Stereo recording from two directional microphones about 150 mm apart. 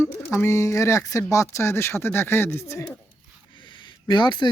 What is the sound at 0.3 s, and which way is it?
Speech, 20° left (ahead or behind).